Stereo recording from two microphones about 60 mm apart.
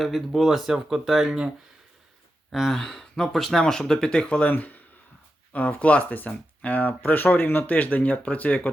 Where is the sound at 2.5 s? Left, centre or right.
Centre.